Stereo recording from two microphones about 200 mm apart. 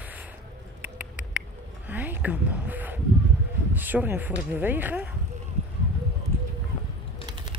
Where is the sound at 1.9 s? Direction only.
10° right (ahead or behind).